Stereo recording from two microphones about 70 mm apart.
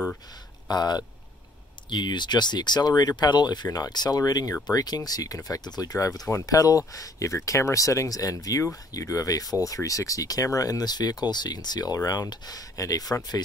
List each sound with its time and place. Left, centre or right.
0.7 s speech: left
3.6 s speech: left
4.6 s speech: left